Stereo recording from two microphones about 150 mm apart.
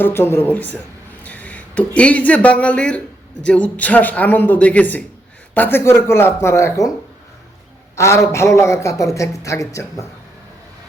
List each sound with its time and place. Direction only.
0.0 s a man's voice: 15° left (ahead or behind)
7.9 s a man's voice: 20° left (ahead or behind)